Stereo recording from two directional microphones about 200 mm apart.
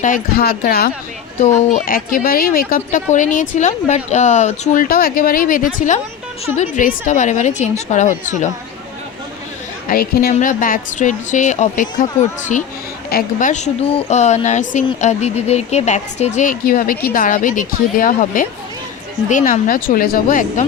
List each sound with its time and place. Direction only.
0.0 s speech: 45° left (ahead or behind)
1.4 s a woman's voice: 35° left (ahead or behind)
9.9 s a woman's voice: 45° left (ahead or behind)